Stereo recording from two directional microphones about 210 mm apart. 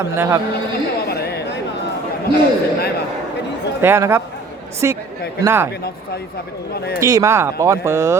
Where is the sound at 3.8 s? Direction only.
10° right (ahead or behind).